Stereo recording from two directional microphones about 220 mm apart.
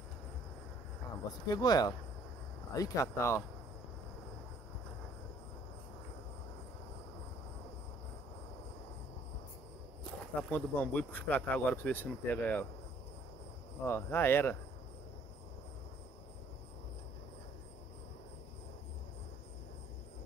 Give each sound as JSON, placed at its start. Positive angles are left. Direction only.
{"t": 1.5, "sound": "speech", "side_deg": 15}
{"t": 10.0, "sound": "speech", "side_deg": 5}
{"t": 13.8, "sound": "speech", "side_deg": 10}